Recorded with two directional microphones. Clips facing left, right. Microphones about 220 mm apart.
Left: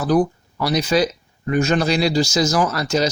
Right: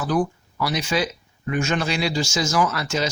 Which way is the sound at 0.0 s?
35° left (ahead or behind).